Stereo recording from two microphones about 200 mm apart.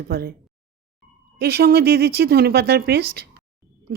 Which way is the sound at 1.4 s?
50° right (ahead or behind).